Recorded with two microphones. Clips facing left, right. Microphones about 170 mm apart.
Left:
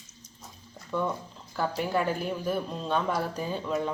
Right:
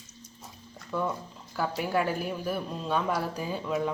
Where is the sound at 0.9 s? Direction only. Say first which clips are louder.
Left 1 dB; 5° right (ahead or behind).